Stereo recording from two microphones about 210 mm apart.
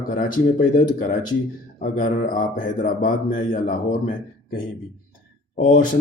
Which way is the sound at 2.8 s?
40° left (ahead or behind).